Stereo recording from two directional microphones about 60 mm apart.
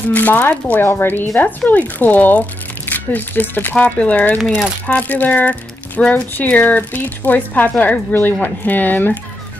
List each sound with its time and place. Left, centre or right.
0.1 s speech: left